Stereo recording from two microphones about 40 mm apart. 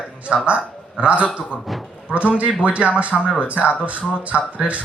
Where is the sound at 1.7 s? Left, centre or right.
Centre.